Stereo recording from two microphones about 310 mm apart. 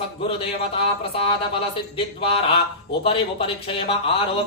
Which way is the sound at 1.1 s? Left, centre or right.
Centre.